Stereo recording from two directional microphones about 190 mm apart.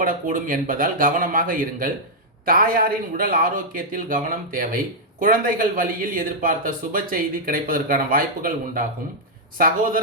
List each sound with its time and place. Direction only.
0.0 s speech: 45° right (ahead or behind)